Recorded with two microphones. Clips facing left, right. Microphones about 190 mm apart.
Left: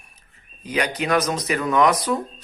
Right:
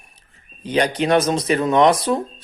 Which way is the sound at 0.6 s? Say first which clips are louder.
Right 5 dB; 30° right (ahead or behind).